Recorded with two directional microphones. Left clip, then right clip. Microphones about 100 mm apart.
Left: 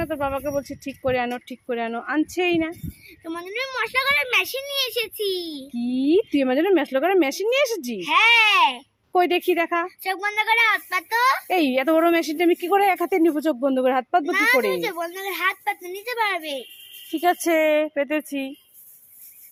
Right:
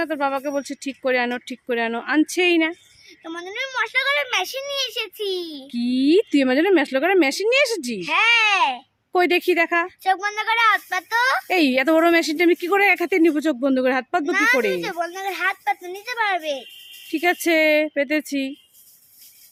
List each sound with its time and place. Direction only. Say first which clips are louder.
0.0 s speech: right 2 dB; 40° right (ahead or behind)
3.2 s a woman's voice: even; 35° right (ahead or behind)
9.1 s a child's voice: right 2 dB; 35° right (ahead or behind)